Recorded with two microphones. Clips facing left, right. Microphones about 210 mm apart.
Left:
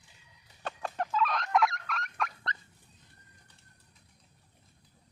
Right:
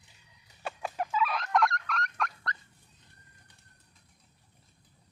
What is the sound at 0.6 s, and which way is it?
Fowl, 10° right (ahead or behind).